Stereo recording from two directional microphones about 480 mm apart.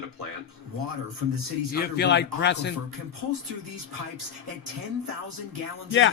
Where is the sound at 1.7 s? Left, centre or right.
Centre.